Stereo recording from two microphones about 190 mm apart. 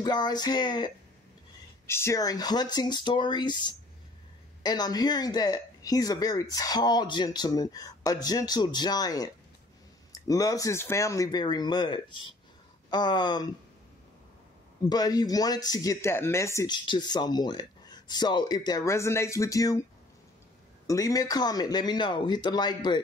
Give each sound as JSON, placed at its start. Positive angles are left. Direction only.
{"t": 0.0, "sound": "speech", "side_deg": 20}
{"t": 14.9, "sound": "speech", "side_deg": 20}
{"t": 20.8, "sound": "speech", "side_deg": 20}